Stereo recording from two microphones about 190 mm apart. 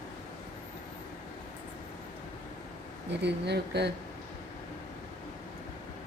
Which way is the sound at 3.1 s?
65° right (ahead or behind).